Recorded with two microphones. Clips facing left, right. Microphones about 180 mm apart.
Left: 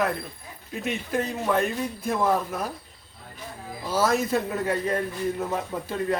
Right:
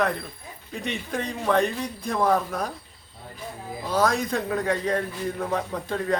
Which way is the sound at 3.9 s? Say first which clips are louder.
Even; 5° left (ahead or behind).